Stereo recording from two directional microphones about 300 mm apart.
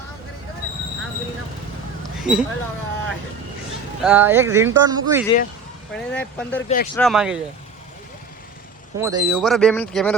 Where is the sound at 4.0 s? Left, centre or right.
Centre.